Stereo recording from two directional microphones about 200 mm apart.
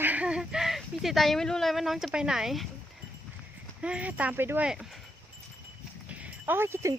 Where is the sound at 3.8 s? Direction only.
5° right (ahead or behind).